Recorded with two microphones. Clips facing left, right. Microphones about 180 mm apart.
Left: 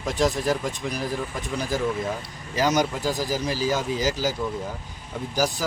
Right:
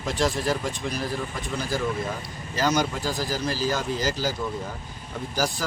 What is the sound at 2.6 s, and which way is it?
Speech, 15° left (ahead or behind).